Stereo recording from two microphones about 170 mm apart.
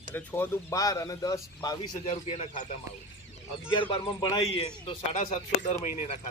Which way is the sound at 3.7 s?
30° left (ahead or behind).